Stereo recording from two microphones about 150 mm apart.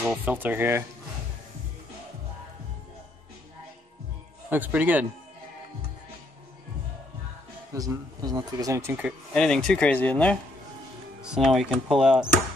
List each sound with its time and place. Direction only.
0.2 s speech: 10° right (ahead or behind)
4.5 s speech: 10° right (ahead or behind)
7.7 s speech: 25° right (ahead or behind)
9.3 s speech: 5° left (ahead or behind)
11.2 s speech: 5° right (ahead or behind)